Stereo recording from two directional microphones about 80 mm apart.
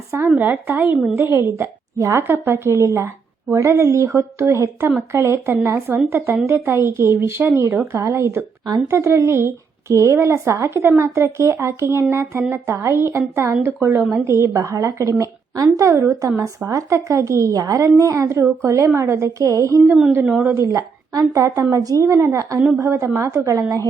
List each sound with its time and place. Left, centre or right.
0.3 s speech: right
1.1 s speech: right
2.2 s a woman's voice: right